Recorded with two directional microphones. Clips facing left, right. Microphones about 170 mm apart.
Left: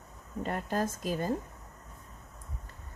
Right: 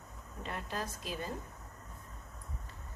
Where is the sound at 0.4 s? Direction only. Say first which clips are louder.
Left 8 dB; 45° left (ahead or behind).